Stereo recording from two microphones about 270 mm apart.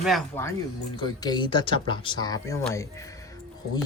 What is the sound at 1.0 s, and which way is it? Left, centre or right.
Speech, centre.